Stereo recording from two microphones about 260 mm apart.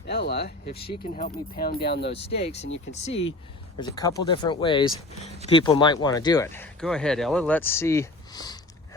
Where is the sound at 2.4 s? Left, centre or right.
Left.